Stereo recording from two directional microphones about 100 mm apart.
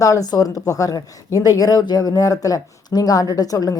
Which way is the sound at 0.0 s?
35° left (ahead or behind).